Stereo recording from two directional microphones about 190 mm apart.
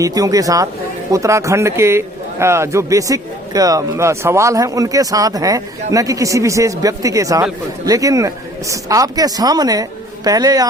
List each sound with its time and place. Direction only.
0.0 s a man's voice: 20° right (ahead or behind)